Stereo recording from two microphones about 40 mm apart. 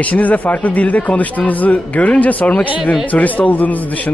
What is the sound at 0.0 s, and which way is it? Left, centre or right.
Speech, left.